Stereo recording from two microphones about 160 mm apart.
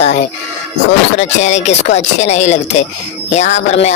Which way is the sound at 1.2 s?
45° left (ahead or behind).